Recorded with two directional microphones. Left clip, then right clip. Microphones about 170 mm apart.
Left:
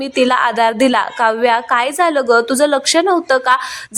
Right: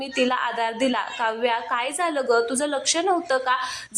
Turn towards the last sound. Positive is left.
turn(degrees=30)  # may be behind; listen again after turning